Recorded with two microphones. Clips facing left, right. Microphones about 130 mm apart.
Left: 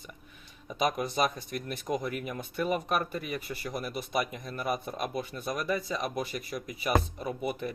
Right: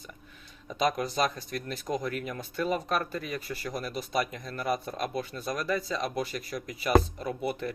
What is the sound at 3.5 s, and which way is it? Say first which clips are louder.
Speech: right 1 dB; 25° left (ahead or behind).